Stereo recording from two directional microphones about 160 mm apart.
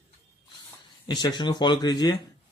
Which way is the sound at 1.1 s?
25° left (ahead or behind).